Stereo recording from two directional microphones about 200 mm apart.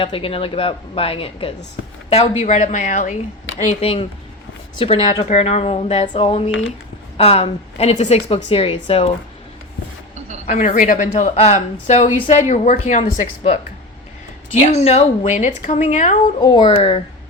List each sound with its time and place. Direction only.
0.0 s a woman's voice: 25° left (ahead or behind)
10.4 s speech: 35° left (ahead or behind)
14.8 s speech: 30° left (ahead or behind)
16.4 s a woman's voice: 20° left (ahead or behind)